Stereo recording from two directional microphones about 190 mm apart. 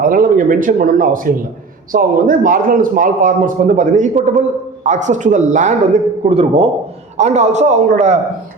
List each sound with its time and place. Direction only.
0.0 s a man's voice: 45° right (ahead or behind)